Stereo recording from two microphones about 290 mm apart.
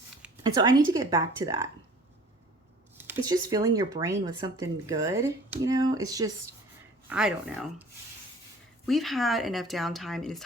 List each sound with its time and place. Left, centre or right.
0.2 s speech: centre
3.0 s speech: centre
8.9 s speech: centre